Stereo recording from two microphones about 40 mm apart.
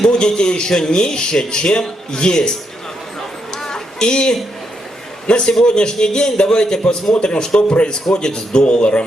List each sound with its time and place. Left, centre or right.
0.3 s a man's voice: left
3.6 s a sound: left
5.3 s a man's voice: left